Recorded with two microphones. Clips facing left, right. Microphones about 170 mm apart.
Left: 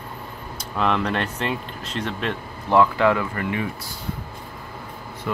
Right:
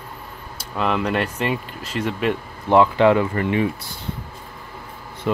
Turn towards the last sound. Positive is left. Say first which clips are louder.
# right 5 dB
turn(degrees=-25)  # may be behind; listen again after turning